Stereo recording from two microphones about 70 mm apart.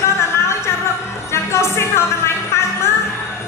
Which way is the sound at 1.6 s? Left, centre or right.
Left.